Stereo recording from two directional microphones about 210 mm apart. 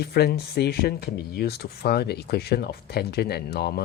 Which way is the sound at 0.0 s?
50° left (ahead or behind).